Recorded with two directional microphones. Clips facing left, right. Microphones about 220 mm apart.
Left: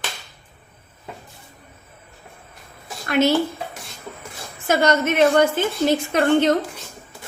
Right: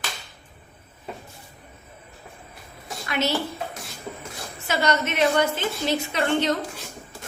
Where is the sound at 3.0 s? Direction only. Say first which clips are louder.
Left 8 dB; 50° left (ahead or behind).